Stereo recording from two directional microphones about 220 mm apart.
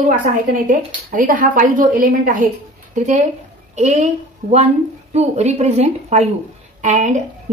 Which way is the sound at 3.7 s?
30° right (ahead or behind).